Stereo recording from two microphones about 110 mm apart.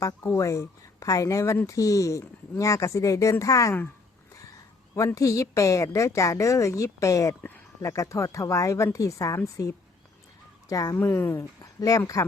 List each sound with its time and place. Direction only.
0.0 s a woman's voice: 25° left (ahead or behind)
4.9 s a woman's voice: 30° left (ahead or behind)